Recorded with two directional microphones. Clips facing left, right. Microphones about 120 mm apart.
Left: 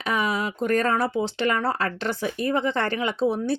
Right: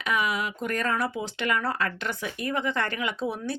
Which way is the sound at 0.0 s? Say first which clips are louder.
Left 2 dB; 35° left (ahead or behind).